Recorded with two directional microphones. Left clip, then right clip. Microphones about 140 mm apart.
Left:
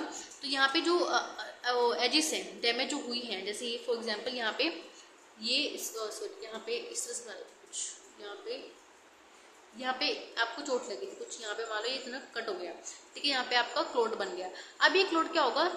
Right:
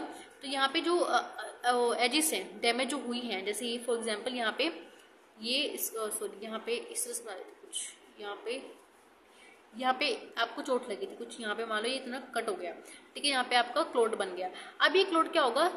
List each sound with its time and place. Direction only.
0.4 s a woman's voice: 20° right (ahead or behind)
9.8 s a woman's voice: 25° right (ahead or behind)